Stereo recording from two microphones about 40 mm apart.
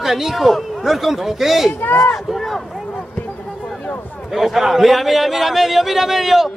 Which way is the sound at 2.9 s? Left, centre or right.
Left.